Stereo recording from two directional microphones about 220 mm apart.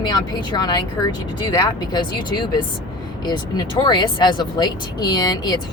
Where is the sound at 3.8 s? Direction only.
20° left (ahead or behind).